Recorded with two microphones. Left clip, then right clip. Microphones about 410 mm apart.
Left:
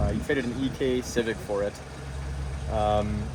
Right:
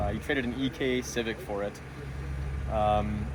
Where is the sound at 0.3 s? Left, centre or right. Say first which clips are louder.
Left 3 dB; centre.